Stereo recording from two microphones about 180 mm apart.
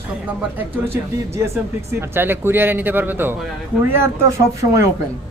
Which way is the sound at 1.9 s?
15° right (ahead or behind).